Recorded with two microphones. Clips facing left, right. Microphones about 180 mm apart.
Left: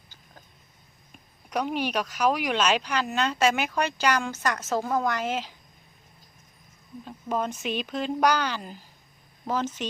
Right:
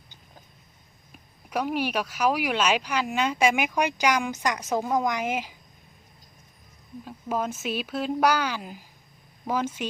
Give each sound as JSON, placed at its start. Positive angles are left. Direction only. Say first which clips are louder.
{"t": 1.5, "sound": "speech", "louder": "right 1 dB", "side_deg": -5}
{"t": 7.0, "sound": "speech", "louder": "even", "side_deg": -5}